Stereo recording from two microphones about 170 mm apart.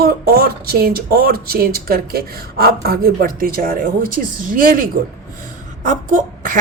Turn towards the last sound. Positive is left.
turn(degrees=-50)  # may be behind; listen again after turning